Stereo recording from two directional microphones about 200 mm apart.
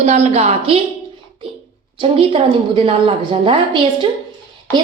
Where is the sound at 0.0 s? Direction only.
35° right (ahead or behind).